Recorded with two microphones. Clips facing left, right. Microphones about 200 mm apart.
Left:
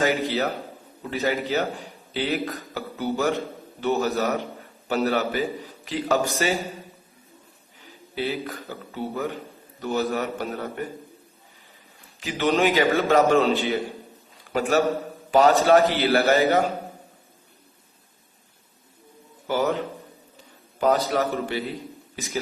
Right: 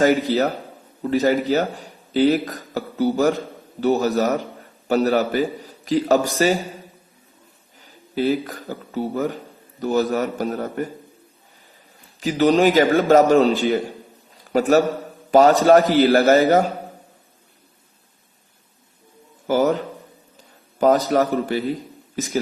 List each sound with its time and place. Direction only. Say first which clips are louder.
0.0 s a man's voice: right 6 dB; 40° right (ahead or behind)
7.8 s a man's voice: right 6 dB; 45° right (ahead or behind)
12.2 s a man's voice: right 6 dB; 40° right (ahead or behind)
19.5 s a man's voice: right 5 dB; 40° right (ahead or behind)